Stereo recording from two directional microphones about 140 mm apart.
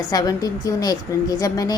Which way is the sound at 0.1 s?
25° left (ahead or behind).